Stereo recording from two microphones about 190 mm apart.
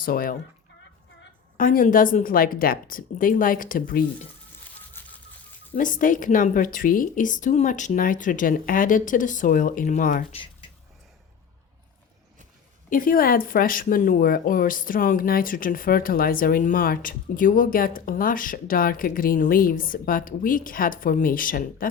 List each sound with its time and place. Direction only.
0.0 s speech: 50° left (ahead or behind)
1.5 s speech: 45° left (ahead or behind)
4.6 s a sound: 10° left (ahead or behind)
5.7 s speech: 45° left (ahead or behind)
10.3 s a sound: 25° left (ahead or behind)
12.9 s speech: 45° left (ahead or behind)